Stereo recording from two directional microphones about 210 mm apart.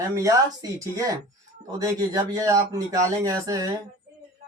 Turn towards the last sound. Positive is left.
turn(degrees=-15)  # may be behind; listen again after turning